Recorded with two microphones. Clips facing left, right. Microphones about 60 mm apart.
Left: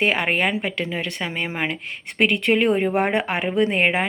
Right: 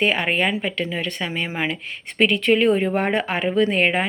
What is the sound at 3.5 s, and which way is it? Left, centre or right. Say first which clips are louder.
Speech: right 1 dB; left.